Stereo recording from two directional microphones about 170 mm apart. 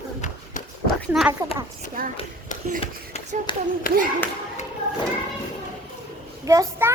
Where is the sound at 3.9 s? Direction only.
55° left (ahead or behind).